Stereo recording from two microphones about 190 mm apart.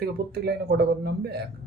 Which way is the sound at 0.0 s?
60° right (ahead or behind).